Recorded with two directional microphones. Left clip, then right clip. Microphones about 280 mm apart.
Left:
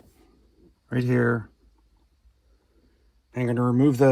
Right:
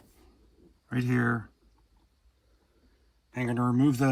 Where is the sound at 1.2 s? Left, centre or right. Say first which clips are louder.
Left 5 dB; left.